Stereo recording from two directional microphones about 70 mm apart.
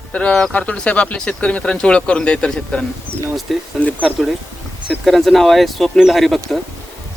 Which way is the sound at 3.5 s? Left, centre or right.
Centre.